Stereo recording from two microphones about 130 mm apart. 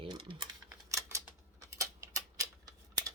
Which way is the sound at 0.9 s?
25° right (ahead or behind).